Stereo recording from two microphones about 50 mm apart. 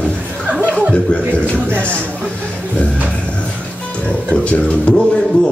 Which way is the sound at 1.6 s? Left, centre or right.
Right.